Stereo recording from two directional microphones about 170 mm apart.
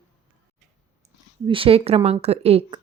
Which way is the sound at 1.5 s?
30° right (ahead or behind).